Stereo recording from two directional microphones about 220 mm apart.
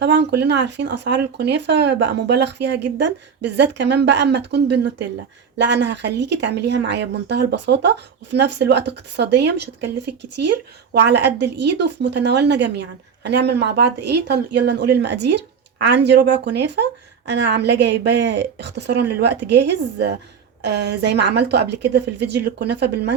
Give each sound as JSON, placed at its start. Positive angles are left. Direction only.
{"t": 0.0, "sound": "speech", "side_deg": -50}
{"t": 10.9, "sound": "speech", "side_deg": -50}